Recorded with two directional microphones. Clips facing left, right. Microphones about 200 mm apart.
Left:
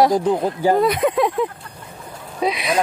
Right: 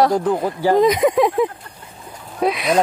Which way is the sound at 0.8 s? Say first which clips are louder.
Right 3 dB; 15° right (ahead or behind).